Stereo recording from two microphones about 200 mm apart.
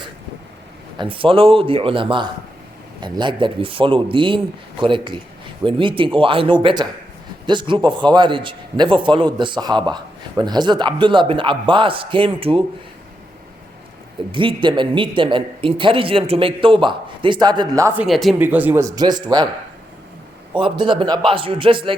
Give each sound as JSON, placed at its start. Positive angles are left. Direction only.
{"t": 0.9, "sound": "a man's voice", "side_deg": -25}
{"t": 14.3, "sound": "a man's voice", "side_deg": -25}
{"t": 18.0, "sound": "speech", "side_deg": 0}
{"t": 20.6, "sound": "a man's voice", "side_deg": -25}